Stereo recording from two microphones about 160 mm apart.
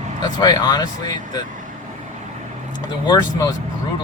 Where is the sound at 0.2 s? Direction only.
25° left (ahead or behind).